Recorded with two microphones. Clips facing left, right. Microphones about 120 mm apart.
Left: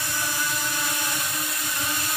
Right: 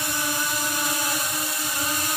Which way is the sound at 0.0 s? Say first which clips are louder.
Right 2 dB; 15° right (ahead or behind).